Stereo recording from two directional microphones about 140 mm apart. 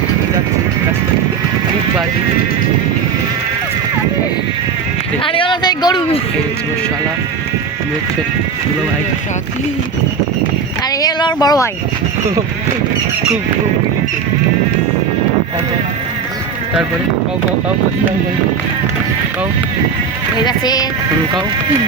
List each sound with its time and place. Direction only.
5.2 s a sound: 40° left (ahead or behind)
11.0 s speech: 30° left (ahead or behind)
20.4 s speech: 30° left (ahead or behind)